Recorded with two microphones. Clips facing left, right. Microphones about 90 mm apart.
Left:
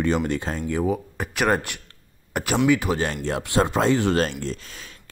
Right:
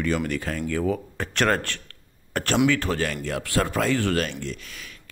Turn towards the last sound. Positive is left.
turn(degrees=35)  # may be behind; listen again after turning